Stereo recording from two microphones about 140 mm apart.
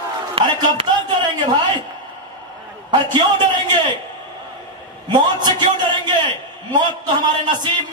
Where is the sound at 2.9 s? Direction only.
30° right (ahead or behind).